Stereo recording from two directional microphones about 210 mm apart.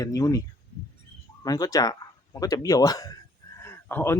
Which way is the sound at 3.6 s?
10° left (ahead or behind).